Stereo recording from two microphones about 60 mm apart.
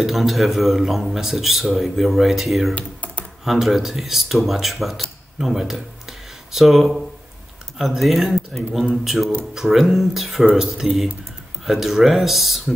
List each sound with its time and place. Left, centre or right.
0.0 s speech: centre
2.7 s computer keyboard: left
3.4 s speech: centre